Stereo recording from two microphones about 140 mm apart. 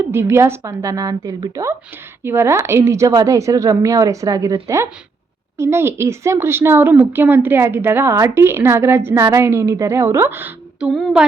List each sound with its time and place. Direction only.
0.0 s a woman's voice: 15° right (ahead or behind); by 11.3 s centre (ahead or behind)